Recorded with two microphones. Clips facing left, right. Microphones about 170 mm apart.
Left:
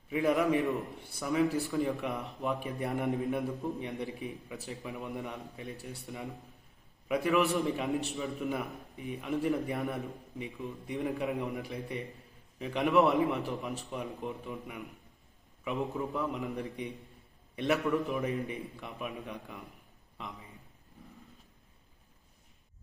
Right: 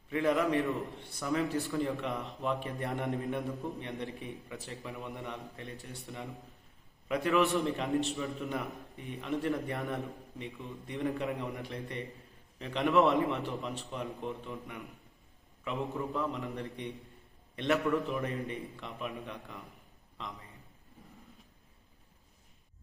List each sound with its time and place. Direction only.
0.8 s a man's voice: centre (ahead or behind)
7.1 s a man's voice: centre (ahead or behind)